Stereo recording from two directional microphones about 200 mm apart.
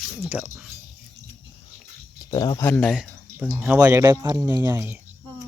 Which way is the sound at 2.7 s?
5° left (ahead or behind).